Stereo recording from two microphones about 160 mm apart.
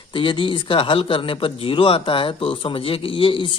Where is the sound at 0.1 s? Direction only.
35° left (ahead or behind).